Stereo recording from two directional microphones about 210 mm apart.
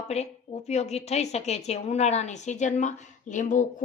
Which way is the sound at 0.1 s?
30° left (ahead or behind).